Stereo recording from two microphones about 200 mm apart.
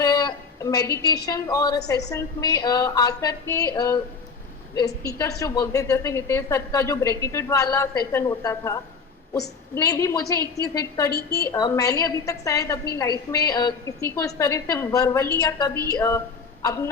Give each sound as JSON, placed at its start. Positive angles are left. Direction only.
{"t": 0.0, "sound": "a woman's voice", "side_deg": 20}
{"t": 5.0, "sound": "a woman's voice", "side_deg": 15}
{"t": 11.1, "sound": "a woman's voice", "side_deg": 55}
{"t": 11.5, "sound": "a woman's voice", "side_deg": 20}